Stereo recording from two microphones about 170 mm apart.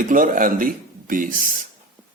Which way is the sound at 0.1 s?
55° right (ahead or behind).